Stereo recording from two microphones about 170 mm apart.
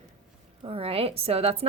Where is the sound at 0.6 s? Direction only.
35° right (ahead or behind).